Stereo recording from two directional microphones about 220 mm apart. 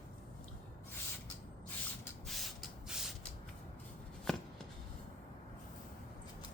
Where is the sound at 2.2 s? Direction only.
Centre (ahead or behind).